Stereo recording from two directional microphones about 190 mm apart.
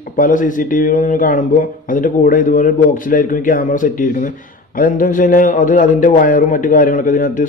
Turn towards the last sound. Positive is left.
turn(degrees=45)  # may be behind; listen again after turning